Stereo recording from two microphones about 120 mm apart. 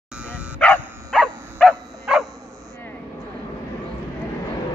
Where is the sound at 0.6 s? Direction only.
10° left (ahead or behind).